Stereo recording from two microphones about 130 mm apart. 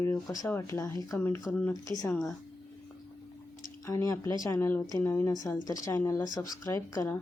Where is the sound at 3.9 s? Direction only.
25° left (ahead or behind).